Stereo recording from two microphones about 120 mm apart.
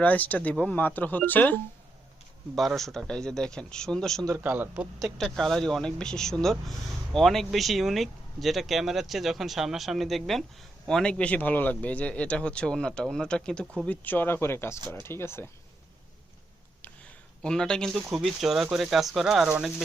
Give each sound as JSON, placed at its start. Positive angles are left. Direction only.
{"t": 0.0, "sound": "speech", "side_deg": 15}
{"t": 2.6, "sound": "speech", "side_deg": 0}
{"t": 4.4, "sound": "speech", "side_deg": -15}
{"t": 4.9, "sound": "speech", "side_deg": 0}
{"t": 17.4, "sound": "speech", "side_deg": 5}